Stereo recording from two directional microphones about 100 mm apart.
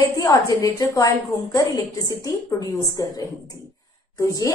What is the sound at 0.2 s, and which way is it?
A woman's voice, 35° left (ahead or behind).